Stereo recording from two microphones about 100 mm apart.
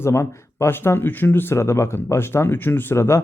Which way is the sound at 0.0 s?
25° left (ahead or behind).